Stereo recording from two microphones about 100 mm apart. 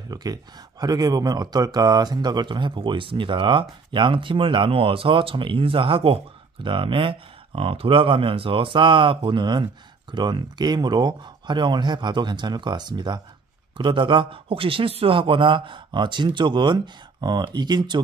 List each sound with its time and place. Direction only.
0.1 s speech: 40° right (ahead or behind)